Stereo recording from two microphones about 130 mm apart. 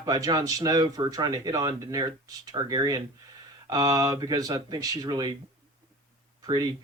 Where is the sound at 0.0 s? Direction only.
30° right (ahead or behind).